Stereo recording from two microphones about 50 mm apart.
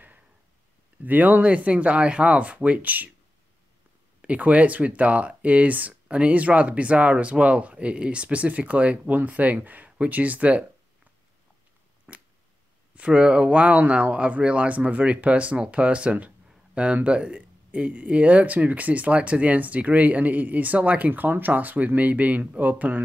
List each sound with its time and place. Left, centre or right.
1.0 s speech: right
4.2 s speech: right
12.1 s a sound: right
12.9 s speech: right